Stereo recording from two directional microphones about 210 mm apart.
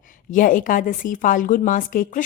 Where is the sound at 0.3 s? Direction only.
40° left (ahead or behind).